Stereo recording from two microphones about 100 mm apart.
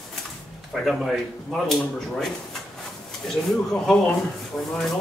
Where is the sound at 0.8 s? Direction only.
Centre (ahead or behind).